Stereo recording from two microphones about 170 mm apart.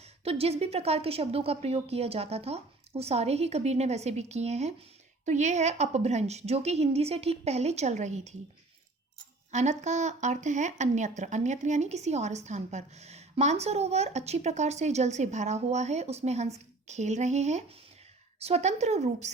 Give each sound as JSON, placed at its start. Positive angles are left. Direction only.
{"t": 0.3, "sound": "speech", "side_deg": -35}
{"t": 9.5, "sound": "speech", "side_deg": -45}